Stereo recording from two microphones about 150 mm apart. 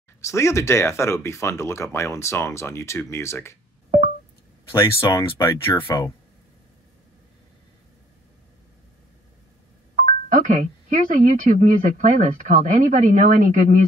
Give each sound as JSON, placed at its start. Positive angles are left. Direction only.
{"t": 0.2, "sound": "speech", "side_deg": 20}
{"t": 5.1, "sound": "speech", "side_deg": 30}
{"t": 10.0, "sound": "speech", "side_deg": -60}